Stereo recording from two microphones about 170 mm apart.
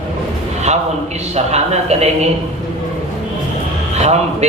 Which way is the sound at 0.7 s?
40° right (ahead or behind).